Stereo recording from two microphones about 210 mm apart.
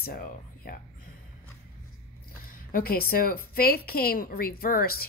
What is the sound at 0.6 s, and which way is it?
Speech, 45° left (ahead or behind).